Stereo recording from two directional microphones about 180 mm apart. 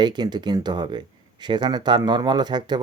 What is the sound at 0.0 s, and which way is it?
Speech, 25° right (ahead or behind).